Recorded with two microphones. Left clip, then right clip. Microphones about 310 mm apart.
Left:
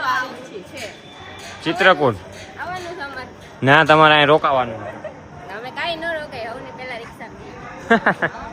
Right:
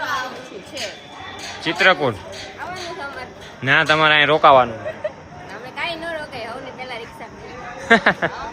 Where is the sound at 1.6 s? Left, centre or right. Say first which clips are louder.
Left 1 dB; centre.